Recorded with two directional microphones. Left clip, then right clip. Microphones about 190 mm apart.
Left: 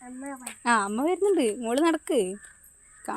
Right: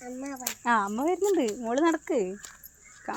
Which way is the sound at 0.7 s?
25° left (ahead or behind).